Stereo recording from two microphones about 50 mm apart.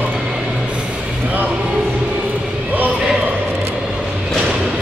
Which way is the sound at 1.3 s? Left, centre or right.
Right.